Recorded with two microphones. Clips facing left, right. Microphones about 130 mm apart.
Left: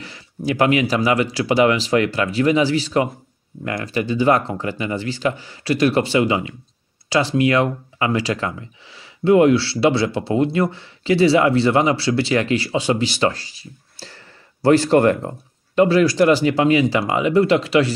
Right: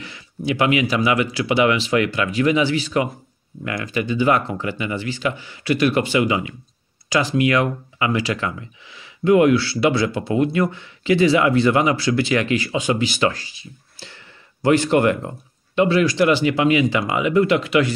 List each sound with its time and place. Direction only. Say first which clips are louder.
0.5 s speech: left 2 dB; 40° left (ahead or behind)